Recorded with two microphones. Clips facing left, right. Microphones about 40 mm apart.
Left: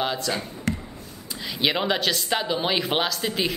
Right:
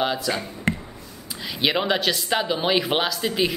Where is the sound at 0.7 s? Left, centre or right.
Right.